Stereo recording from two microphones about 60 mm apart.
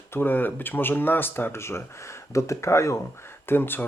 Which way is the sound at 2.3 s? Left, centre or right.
Left.